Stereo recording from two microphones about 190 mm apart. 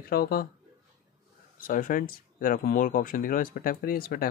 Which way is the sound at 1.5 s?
45° left (ahead or behind).